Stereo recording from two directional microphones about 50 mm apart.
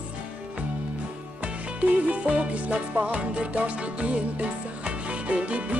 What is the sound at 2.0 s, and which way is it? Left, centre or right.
Music, right.